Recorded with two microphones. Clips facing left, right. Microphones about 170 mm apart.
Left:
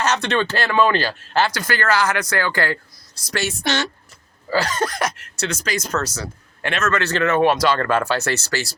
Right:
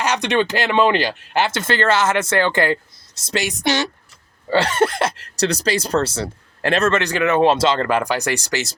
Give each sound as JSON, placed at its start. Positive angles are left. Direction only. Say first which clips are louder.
{"t": 0.0, "sound": "speech", "louder": "right 1 dB", "side_deg": -15}
{"t": 4.4, "sound": "speech", "louder": "right 4 dB", "side_deg": -30}
{"t": 7.0, "sound": "speech", "louder": "right 1 dB", "side_deg": -15}